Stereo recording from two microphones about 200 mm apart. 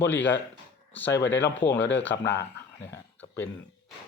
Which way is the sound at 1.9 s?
60° left (ahead or behind).